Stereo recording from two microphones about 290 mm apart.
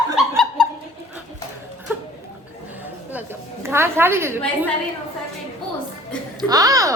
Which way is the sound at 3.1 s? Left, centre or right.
Centre.